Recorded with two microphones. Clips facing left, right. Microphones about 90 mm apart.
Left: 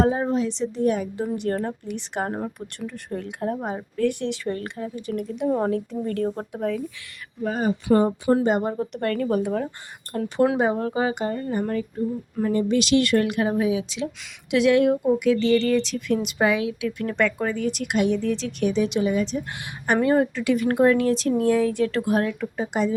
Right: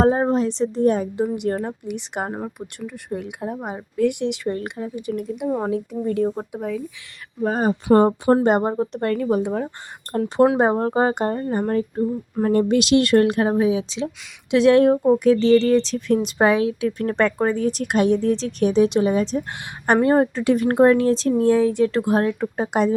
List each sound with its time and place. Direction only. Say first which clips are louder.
0.0 s speech: right 4 dB; 40° right (ahead or behind)
1.1 s speech: right 3 dB; 15° right (ahead or behind)
7.4 s speech: right 4 dB; 45° right (ahead or behind)
8.6 s speech: right 3 dB; 30° right (ahead or behind)
10.1 s speech: right 4 dB; 35° right (ahead or behind)
22.5 s speech: right 3 dB; 55° right (ahead or behind)